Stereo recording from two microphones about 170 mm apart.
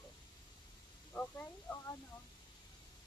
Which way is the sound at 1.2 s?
10° left (ahead or behind).